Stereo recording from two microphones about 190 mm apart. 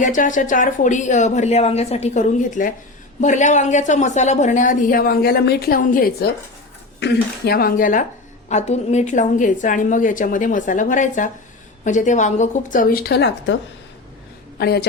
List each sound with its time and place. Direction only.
0.0 s a woman's voice: 45° left (ahead or behind)
14.6 s a woman's voice: 55° left (ahead or behind)